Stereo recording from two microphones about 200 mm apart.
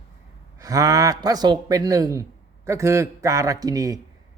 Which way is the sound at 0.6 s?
15° right (ahead or behind).